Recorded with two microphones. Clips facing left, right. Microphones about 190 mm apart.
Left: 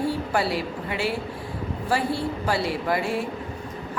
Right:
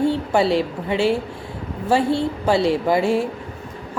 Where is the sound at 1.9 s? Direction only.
25° right (ahead or behind).